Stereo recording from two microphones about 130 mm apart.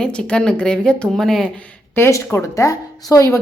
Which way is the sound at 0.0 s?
5° left (ahead or behind).